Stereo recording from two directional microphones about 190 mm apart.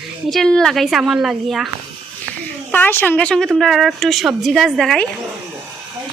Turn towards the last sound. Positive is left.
turn(degrees=0)  # may be behind; listen again after turning